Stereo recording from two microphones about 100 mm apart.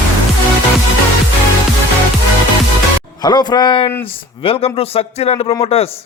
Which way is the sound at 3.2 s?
45° left (ahead or behind).